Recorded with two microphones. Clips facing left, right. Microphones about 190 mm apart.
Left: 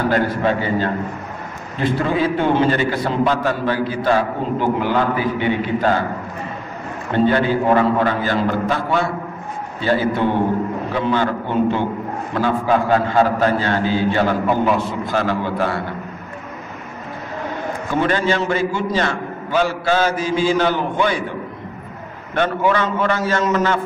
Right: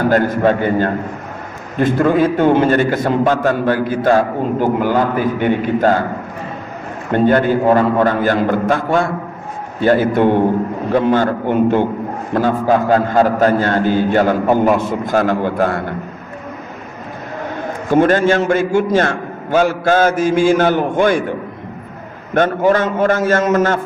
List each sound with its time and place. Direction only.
0.0 s a man's voice: 45° right (ahead or behind)
7.1 s a man's voice: 50° right (ahead or behind)
17.9 s a man's voice: 45° right (ahead or behind)
22.3 s a man's voice: 45° right (ahead or behind)